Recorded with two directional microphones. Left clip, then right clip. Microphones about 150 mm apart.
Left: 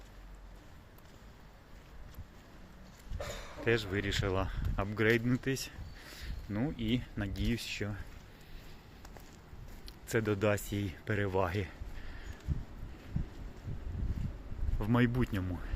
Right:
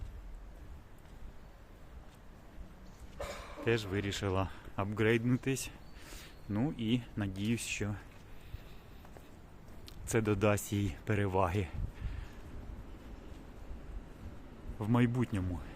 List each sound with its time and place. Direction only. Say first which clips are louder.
3.6 s speech: left 2 dB; 15° right (ahead or behind)
9.8 s speech: even; 25° right (ahead or behind)
14.8 s speech: left 1 dB; 5° right (ahead or behind)